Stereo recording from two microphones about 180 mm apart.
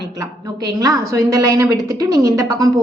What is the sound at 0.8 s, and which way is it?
A woman's voice, 20° right (ahead or behind).